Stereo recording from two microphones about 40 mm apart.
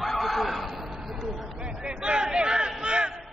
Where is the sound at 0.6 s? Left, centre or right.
Centre.